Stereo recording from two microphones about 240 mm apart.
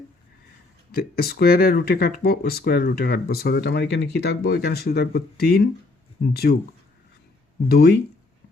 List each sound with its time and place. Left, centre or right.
0.9 s speech: left
7.7 s speech: left